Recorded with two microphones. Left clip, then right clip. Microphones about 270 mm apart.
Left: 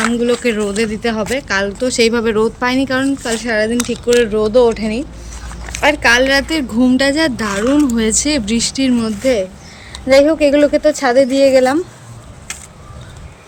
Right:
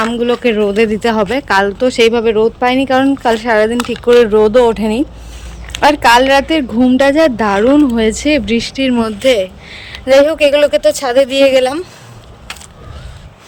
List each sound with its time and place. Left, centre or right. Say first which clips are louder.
0.1 s a woman's voice: right 2 dB; centre
9.2 s speech: right 5 dB; right